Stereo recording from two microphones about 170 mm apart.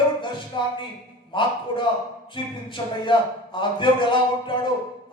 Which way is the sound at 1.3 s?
30° left (ahead or behind).